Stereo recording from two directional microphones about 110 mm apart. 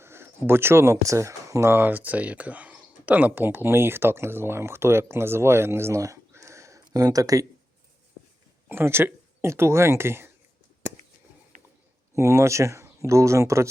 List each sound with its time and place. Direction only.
0.0 s speech: 20° right (ahead or behind)
8.7 s speech: 20° right (ahead or behind)
12.1 s speech: 25° right (ahead or behind)